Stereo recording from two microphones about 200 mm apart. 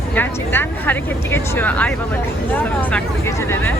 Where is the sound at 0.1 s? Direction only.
10° left (ahead or behind).